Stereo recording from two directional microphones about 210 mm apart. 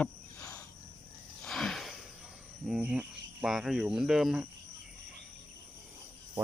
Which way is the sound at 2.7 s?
5° right (ahead or behind).